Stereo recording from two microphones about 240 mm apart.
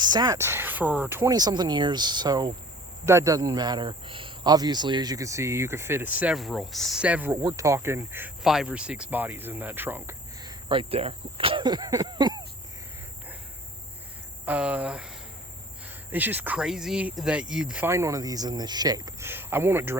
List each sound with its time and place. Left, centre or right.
0.0 s speech: centre
10.7 s speech: right
14.4 s speech: centre
16.1 s speech: centre